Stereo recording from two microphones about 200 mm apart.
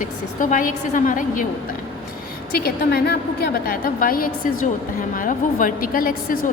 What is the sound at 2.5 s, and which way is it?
A woman's voice, 55° left (ahead or behind).